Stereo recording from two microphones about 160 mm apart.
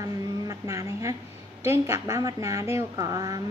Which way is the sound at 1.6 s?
20° right (ahead or behind).